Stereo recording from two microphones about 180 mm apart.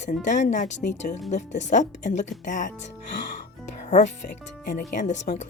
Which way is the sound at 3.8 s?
40° left (ahead or behind).